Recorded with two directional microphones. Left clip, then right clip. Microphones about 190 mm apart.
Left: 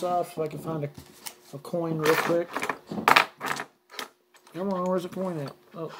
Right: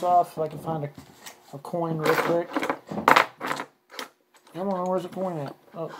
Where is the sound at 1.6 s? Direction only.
25° left (ahead or behind).